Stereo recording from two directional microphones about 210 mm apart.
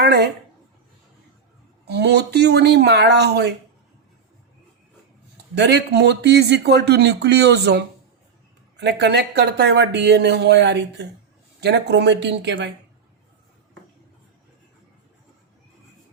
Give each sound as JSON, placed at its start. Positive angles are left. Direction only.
{"t": 0.0, "sound": "speech", "side_deg": -50}
{"t": 1.8, "sound": "speech", "side_deg": -50}
{"t": 5.5, "sound": "speech", "side_deg": -55}